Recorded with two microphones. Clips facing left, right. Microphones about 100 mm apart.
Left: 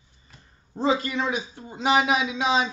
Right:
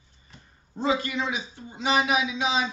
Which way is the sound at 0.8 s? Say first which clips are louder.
Left 2 dB; 35° left (ahead or behind).